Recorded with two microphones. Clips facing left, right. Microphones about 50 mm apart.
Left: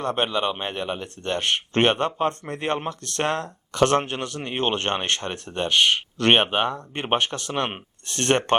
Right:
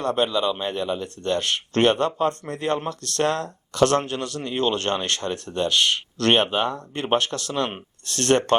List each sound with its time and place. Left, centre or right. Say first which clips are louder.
0.0 s speech: right 2 dB; left